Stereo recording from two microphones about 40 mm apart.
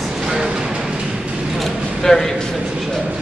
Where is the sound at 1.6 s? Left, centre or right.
Centre.